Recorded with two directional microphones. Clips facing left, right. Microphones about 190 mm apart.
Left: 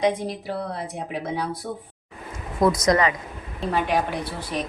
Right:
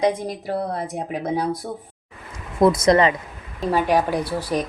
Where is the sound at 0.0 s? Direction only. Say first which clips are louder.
Right 2 dB; 45° right (ahead or behind).